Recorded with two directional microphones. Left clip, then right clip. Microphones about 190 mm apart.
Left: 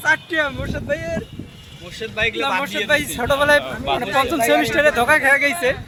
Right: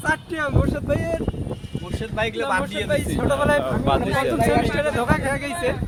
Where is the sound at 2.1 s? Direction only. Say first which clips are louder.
Left 3 dB; 25° right (ahead or behind).